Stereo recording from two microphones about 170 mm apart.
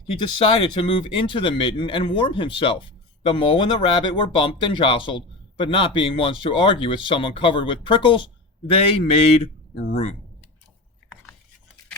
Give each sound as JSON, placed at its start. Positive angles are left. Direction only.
{"t": 0.2, "sound": "speech", "side_deg": 30}